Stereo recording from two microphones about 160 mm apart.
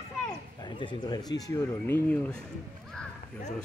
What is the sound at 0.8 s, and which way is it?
Speech, 30° left (ahead or behind).